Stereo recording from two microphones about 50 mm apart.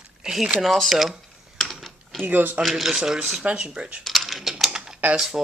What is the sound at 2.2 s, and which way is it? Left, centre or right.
Speech, right.